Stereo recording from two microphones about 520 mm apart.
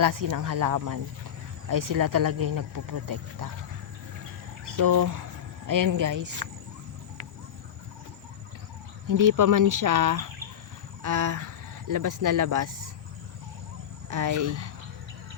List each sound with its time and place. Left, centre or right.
0.0 s speech: right
4.6 s speech: right
9.0 s speech: right
14.1 s speech: right